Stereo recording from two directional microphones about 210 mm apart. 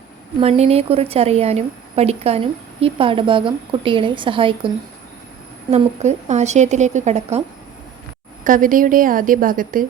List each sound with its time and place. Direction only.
0.3 s a woman's voice: 30° right (ahead or behind)
5.7 s a woman's voice: 35° right (ahead or behind)
8.4 s a woman's voice: 40° right (ahead or behind)